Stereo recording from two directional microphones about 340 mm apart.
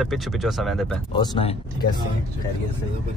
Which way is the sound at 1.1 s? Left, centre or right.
Centre.